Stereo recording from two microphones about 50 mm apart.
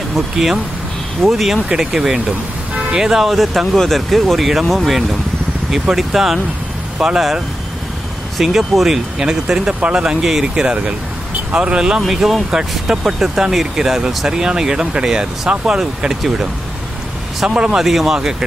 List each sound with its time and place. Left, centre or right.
0.1 s speech: centre; by 10.0 s right
10.0 s speech: centre
17.5 s speech: right
17.7 s speech: centre